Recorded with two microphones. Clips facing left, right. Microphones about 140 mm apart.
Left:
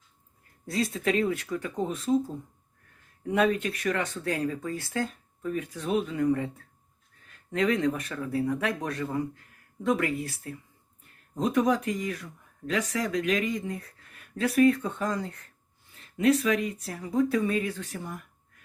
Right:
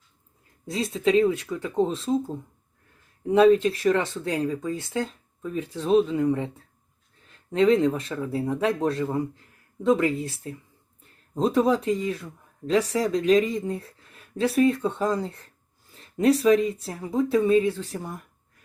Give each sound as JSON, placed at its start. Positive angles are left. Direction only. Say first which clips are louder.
{"t": 0.7, "sound": "speech", "louder": "right 5 dB", "side_deg": -20}
{"t": 7.5, "sound": "speech", "louder": "right 6 dB", "side_deg": -30}